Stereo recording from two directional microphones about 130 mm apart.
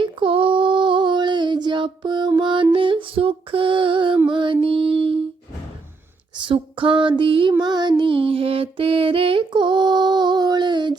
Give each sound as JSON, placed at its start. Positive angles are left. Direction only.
{"t": 0.0, "sound": "female singing", "side_deg": -40}
{"t": 2.7, "sound": "music", "side_deg": -45}
{"t": 4.3, "sound": "mantra", "side_deg": -40}
{"t": 6.3, "sound": "female singing", "side_deg": -40}
{"t": 7.6, "sound": "music", "side_deg": -35}